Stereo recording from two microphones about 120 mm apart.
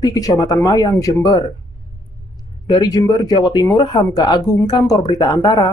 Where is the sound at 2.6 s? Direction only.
35° left (ahead or behind).